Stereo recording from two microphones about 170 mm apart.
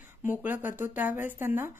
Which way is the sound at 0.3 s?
10° right (ahead or behind).